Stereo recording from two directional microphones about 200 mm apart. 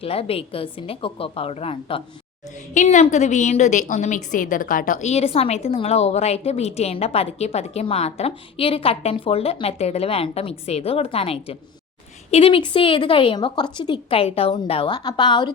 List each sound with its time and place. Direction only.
0.0 s a woman's voice: 30° left (ahead or behind)